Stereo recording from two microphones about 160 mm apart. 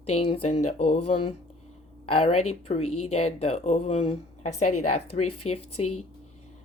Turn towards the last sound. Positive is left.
turn(degrees=40)  # may be behind; listen again after turning